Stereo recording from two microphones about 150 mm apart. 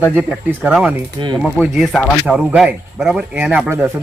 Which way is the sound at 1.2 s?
30° right (ahead or behind).